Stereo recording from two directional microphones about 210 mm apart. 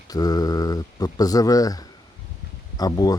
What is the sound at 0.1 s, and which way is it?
Speech, 15° left (ahead or behind).